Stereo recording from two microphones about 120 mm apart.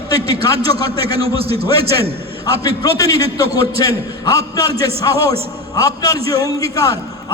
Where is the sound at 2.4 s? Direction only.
30° left (ahead or behind).